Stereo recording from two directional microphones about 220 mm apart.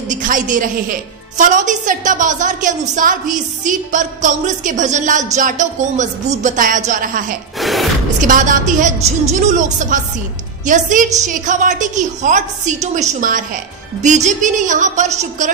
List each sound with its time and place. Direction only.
0.1 s a woman's voice: 35° right (ahead or behind)
7.5 s a sound: centre (ahead or behind)
8.2 s a woman's voice: 35° right (ahead or behind)